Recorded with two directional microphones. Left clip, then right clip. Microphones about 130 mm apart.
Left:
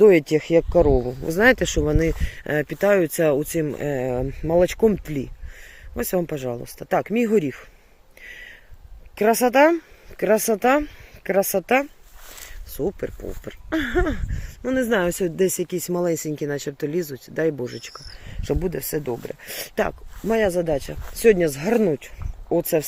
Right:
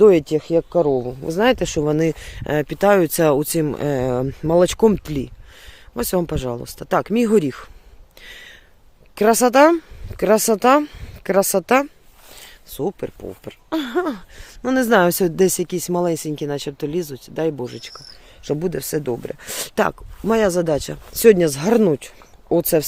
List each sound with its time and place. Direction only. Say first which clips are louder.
0.0 s speech: right 2 dB; 20° right (ahead or behind)
0.3 s speech: even; centre (ahead or behind); by 7.1 s 25° right (ahead or behind)
7.1 s speech: right 3 dB; 40° right (ahead or behind)
9.1 s speech: right 3 dB; 30° right (ahead or behind)
12.8 s speech: right 2 dB; 15° right (ahead or behind)
14.6 s speech: right 6 dB; 40° right (ahead or behind)
15.7 s speech: right 3 dB; 20° right (ahead or behind)
16.1 s speech: right 2 dB; 35° right (ahead or behind)
18.6 s speech: right 3 dB; 25° right (ahead or behind); by 22.0 s 40° right (ahead or behind)